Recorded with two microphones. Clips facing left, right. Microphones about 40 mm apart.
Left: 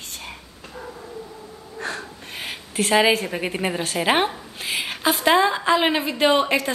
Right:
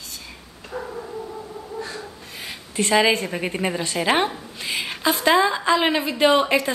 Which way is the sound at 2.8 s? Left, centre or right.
Centre.